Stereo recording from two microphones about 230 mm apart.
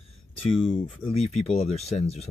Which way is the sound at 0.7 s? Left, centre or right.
Left.